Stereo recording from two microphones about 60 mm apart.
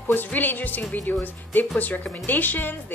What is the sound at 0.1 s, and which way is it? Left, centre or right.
Speech, left.